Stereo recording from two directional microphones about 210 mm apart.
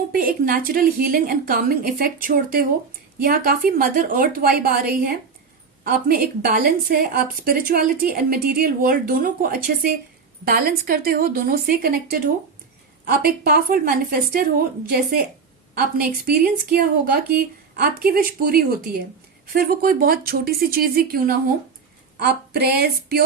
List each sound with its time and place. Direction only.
0.1 s a woman's voice: 45° right (ahead or behind)